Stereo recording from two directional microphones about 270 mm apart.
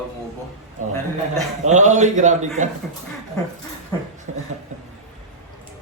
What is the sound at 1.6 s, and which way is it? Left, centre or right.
A man's voice, right.